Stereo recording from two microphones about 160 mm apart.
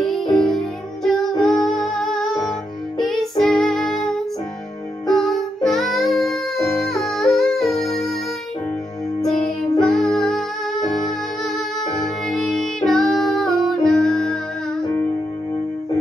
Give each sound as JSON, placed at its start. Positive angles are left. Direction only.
{"t": 0.0, "sound": "music", "side_deg": 5}
{"t": 9.2, "sound": "music", "side_deg": 5}